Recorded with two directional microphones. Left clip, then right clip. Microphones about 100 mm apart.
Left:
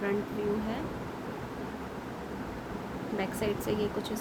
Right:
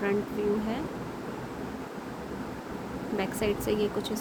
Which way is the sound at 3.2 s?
30° right (ahead or behind).